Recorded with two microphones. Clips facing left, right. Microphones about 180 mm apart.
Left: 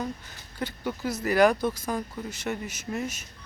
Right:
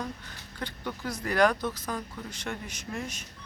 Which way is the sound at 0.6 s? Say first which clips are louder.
Left 5 dB; 5° left (ahead or behind).